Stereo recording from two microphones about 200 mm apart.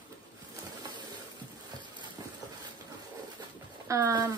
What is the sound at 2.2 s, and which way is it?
Train, 15° right (ahead or behind).